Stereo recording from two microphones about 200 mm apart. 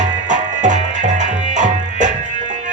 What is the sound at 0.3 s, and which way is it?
Music, 40° right (ahead or behind).